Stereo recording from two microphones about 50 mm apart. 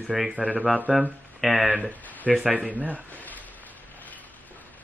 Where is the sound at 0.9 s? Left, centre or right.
Centre.